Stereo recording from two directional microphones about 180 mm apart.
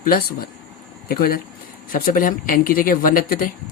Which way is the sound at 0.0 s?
55° left (ahead or behind).